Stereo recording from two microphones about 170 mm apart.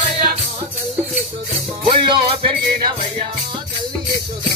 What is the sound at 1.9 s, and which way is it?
Music, 30° right (ahead or behind).